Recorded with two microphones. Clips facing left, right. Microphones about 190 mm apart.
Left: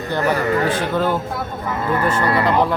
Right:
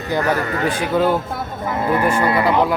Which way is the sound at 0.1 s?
10° right (ahead or behind).